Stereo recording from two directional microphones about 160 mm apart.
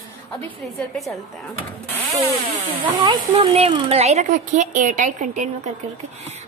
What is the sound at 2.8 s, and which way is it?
A woman's voice, 35° right (ahead or behind).